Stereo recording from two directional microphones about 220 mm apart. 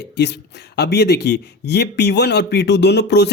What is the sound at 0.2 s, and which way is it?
Speech, 50° left (ahead or behind).